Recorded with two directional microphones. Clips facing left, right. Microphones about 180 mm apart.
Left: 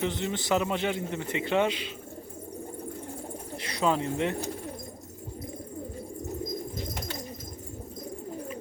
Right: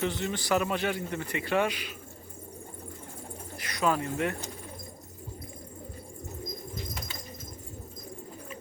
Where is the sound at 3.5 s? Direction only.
30° left (ahead or behind).